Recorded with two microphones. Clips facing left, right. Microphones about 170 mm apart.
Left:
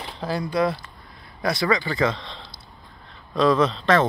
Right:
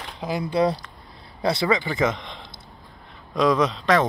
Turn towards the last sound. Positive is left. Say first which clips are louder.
# left 1 dB
turn(degrees=-15)  # may be behind; listen again after turning